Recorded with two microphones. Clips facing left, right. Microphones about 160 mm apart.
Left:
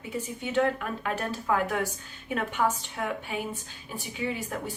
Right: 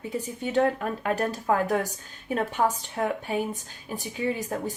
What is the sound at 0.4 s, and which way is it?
A woman's voice, 40° right (ahead or behind).